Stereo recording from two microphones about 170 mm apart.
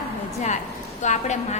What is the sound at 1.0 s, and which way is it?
Speech, 45° left (ahead or behind).